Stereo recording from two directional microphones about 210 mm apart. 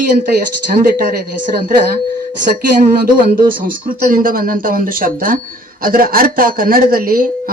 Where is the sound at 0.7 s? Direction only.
45° right (ahead or behind).